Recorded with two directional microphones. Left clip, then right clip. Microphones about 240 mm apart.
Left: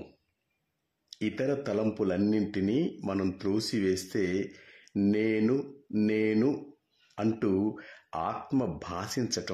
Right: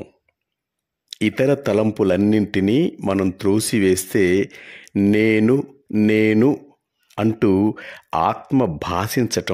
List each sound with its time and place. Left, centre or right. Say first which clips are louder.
1.1 s speech: right 12 dB; right